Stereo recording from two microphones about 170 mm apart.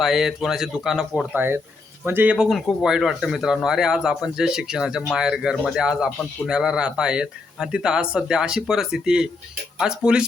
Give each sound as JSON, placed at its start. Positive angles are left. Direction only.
{"t": 0.0, "sound": "speech", "side_deg": 0}
{"t": 1.4, "sound": "speech", "side_deg": -15}